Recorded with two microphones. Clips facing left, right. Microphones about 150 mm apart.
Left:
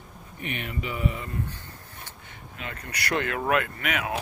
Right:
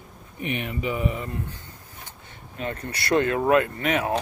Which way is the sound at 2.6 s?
30° right (ahead or behind).